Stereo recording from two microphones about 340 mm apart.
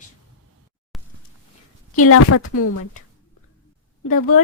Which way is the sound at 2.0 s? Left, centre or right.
Left.